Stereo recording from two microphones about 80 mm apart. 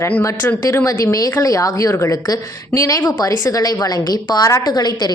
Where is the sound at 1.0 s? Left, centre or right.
Left.